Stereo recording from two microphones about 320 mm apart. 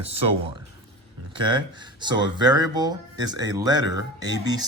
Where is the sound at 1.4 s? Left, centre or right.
Centre.